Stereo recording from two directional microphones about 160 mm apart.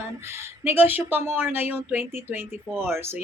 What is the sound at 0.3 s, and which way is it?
Speech, 15° right (ahead or behind).